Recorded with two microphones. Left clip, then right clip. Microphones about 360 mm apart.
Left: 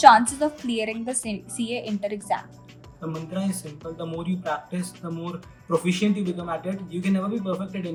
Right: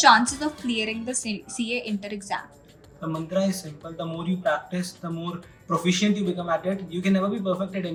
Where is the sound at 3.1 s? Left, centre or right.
Centre.